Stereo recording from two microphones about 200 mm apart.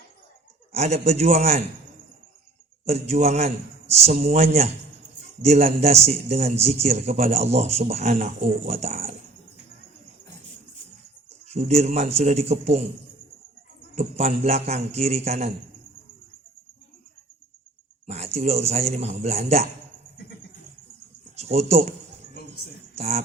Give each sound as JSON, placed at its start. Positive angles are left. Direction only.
{"t": 0.7, "sound": "a man's voice", "side_deg": -30}
{"t": 2.8, "sound": "a man's voice", "side_deg": -30}
{"t": 11.4, "sound": "a man's voice", "side_deg": -30}
{"t": 13.9, "sound": "a man's voice", "side_deg": -35}
{"t": 18.0, "sound": "a man's voice", "side_deg": -30}
{"t": 21.3, "sound": "speech", "side_deg": -30}
{"t": 23.0, "sound": "speech", "side_deg": -30}